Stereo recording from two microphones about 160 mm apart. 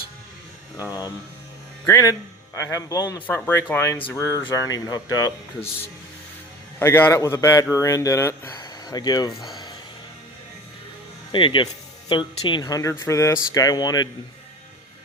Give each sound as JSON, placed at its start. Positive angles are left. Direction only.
{"t": 0.8, "sound": "speech", "side_deg": 20}
{"t": 4.2, "sound": "speech", "side_deg": -15}
{"t": 4.4, "sound": "speech", "side_deg": 20}
{"t": 6.7, "sound": "speech", "side_deg": 15}
{"t": 8.5, "sound": "a sound", "side_deg": 25}
{"t": 11.3, "sound": "speech", "side_deg": 30}